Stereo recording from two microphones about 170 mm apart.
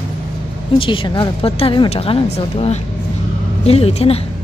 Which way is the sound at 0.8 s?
30° left (ahead or behind).